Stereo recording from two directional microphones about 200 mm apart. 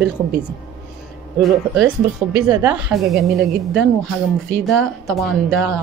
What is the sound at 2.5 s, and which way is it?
Speech, 10° right (ahead or behind).